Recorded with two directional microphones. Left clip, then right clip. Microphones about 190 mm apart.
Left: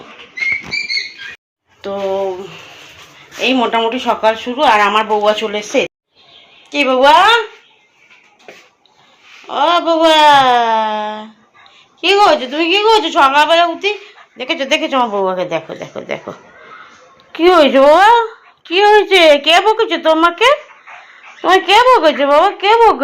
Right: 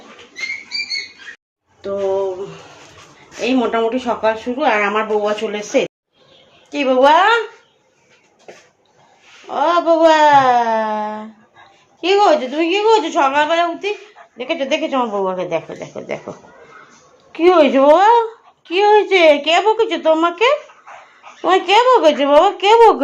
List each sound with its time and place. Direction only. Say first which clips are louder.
3.4 s a woman's voice: left 3 dB; centre (ahead or behind)
9.5 s a woman's voice: left 2 dB; centre (ahead or behind)
17.3 s a woman's voice: left 3 dB; 5° right (ahead or behind)
21.7 s a woman's voice: left 2 dB; 10° right (ahead or behind)